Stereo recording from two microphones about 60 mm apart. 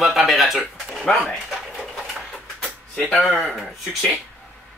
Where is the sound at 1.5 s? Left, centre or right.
Centre.